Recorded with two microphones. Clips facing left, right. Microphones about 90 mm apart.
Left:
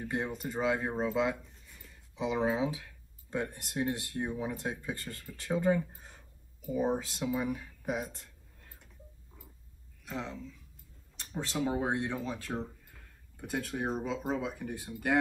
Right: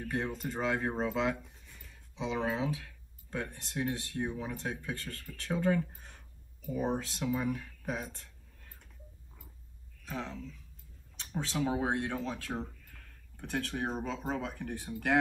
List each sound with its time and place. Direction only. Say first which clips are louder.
0.0 s speech: even; 15° left (ahead or behind)
10.0 s speech: even; 5° left (ahead or behind)
12.8 s a sound: right 1 dB; 15° left (ahead or behind)
13.5 s speech: left 1 dB; 5° left (ahead or behind)